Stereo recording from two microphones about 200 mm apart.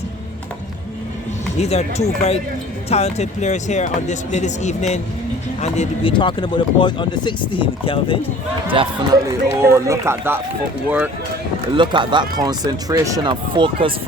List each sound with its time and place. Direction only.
1.5 s speech: 30° left (ahead or behind)
8.8 s speech: 25° right (ahead or behind)
9.6 s speech: 15° right (ahead or behind)
11.7 s speech: 25° right (ahead or behind)